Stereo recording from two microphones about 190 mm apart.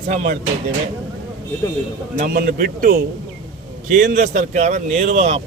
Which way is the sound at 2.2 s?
55° right (ahead or behind).